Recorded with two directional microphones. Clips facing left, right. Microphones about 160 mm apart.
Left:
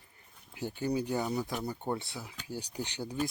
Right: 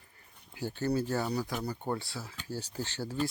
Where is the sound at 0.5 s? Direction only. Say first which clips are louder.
Right 1 dB; 15° left (ahead or behind).